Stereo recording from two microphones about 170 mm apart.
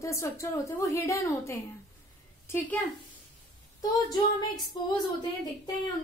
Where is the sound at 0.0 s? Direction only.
15° left (ahead or behind).